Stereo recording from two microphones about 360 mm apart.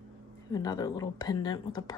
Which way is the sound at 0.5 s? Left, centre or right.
Centre.